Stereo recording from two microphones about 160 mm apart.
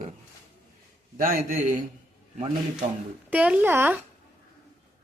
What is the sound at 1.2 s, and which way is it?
Speech, 60° right (ahead or behind).